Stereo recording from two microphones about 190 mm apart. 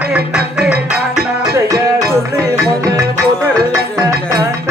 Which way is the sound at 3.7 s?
20° right (ahead or behind).